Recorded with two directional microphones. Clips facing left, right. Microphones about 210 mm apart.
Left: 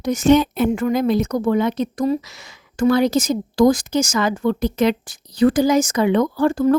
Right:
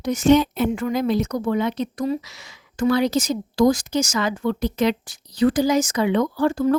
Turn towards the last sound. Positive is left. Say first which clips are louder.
# left 3 dB
turn(degrees=50)  # may be behind; listen again after turning